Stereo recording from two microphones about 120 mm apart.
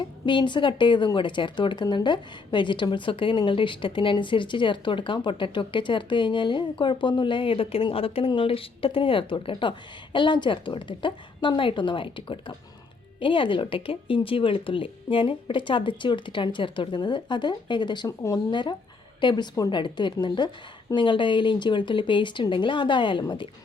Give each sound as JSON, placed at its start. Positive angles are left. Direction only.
{"t": 0.3, "sound": "speech", "side_deg": 40}
{"t": 19.2, "sound": "a woman's voice", "side_deg": 40}